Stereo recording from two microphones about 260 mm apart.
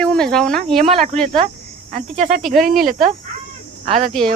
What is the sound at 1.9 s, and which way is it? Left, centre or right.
Speech, right.